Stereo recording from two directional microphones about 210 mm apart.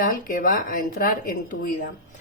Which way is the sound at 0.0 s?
40° left (ahead or behind).